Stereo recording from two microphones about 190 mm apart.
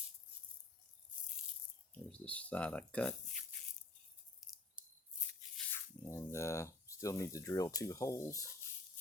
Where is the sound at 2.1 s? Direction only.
5° left (ahead or behind).